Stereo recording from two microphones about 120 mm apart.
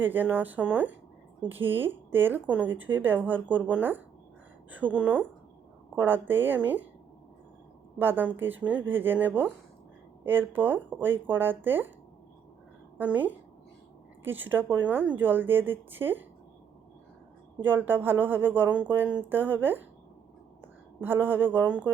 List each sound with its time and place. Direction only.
0.0 s speech: 15° right (ahead or behind)
7.9 s speech: 15° right (ahead or behind)
13.0 s speech: 15° right (ahead or behind)
17.7 s a woman's voice: 15° right (ahead or behind)